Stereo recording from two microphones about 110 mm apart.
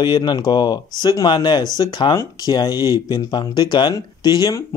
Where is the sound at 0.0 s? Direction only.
40° left (ahead or behind).